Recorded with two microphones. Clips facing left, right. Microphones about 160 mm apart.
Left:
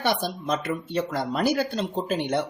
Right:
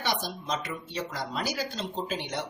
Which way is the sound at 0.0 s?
55° left (ahead or behind).